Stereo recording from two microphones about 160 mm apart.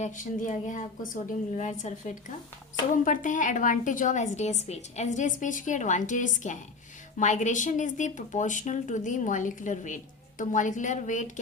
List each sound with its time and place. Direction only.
0.0 s speech: 55° left (ahead or behind)